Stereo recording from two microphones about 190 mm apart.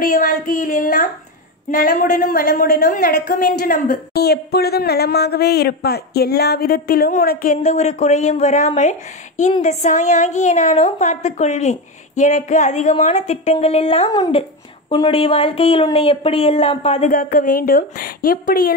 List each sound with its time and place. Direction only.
0.0 s a woman's voice: 45° left (ahead or behind)
17.1 s a woman's voice: 45° left (ahead or behind)